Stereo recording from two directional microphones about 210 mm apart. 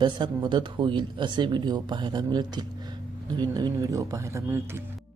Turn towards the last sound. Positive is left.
turn(degrees=-10)  # may be behind; listen again after turning